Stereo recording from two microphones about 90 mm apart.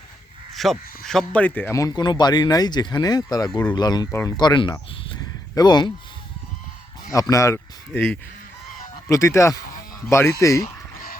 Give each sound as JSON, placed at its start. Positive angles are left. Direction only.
{"t": 0.5, "sound": "speech", "side_deg": 0}
{"t": 1.7, "sound": "speech", "side_deg": 40}
{"t": 2.0, "sound": "speech", "side_deg": 55}
{"t": 7.1, "sound": "speech", "side_deg": 35}
{"t": 9.0, "sound": "speech", "side_deg": 35}